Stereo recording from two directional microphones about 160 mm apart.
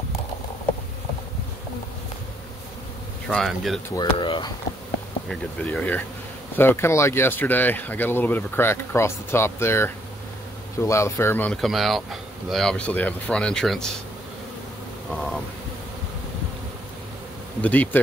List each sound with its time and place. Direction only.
3.3 s speech: centre (ahead or behind)
3.9 s speech: 30° left (ahead or behind)
5.3 s speech: 5° left (ahead or behind)
15.0 s speech: 5° left (ahead or behind)
17.6 s speech: 10° left (ahead or behind)